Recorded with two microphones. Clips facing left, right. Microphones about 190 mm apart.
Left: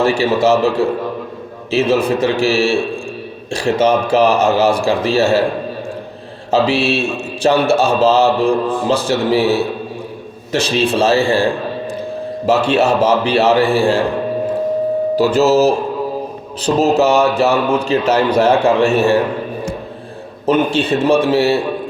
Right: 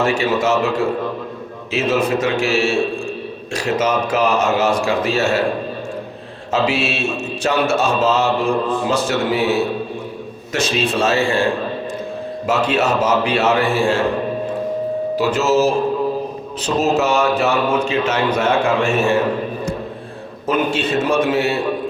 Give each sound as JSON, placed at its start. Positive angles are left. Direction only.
{"t": 0.0, "sound": "a man's voice", "side_deg": 35}
{"t": 1.7, "sound": "a man's voice", "side_deg": 35}
{"t": 6.5, "sound": "a man's voice", "side_deg": 35}
{"t": 12.5, "sound": "a man's voice", "side_deg": 30}
{"t": 15.1, "sound": "a man's voice", "side_deg": 35}
{"t": 20.5, "sound": "a man's voice", "side_deg": 30}